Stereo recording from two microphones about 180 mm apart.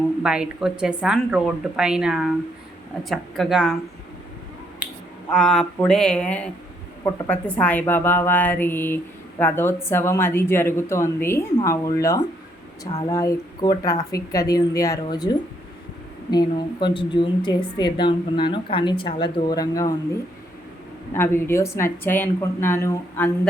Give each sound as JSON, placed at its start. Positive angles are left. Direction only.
{"t": 0.2, "sound": "speech", "side_deg": -5}
{"t": 4.8, "sound": "finger snapping", "side_deg": -10}
{"t": 5.3, "sound": "a woman's voice", "side_deg": 5}
{"t": 21.1, "sound": "a woman's voice", "side_deg": 15}